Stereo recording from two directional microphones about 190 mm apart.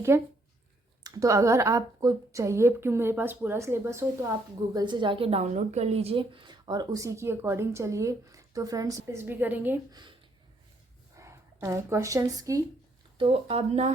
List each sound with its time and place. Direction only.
0.1 s speech: 15° right (ahead or behind)
9.9 s speech: 25° right (ahead or behind)
11.2 s speech: 15° right (ahead or behind)
13.1 s speech: 30° right (ahead or behind)